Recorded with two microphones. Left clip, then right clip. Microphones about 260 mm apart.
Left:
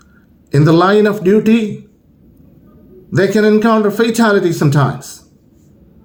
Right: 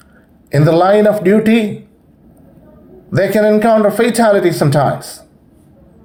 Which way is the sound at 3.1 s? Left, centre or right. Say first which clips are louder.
Even; right.